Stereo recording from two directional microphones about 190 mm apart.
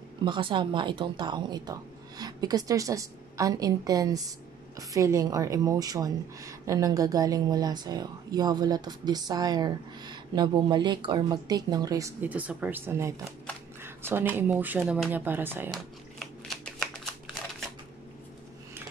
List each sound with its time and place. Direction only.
0.2 s a woman's voice: 25° right (ahead or behind)
15.7 s shuffling cards: centre (ahead or behind)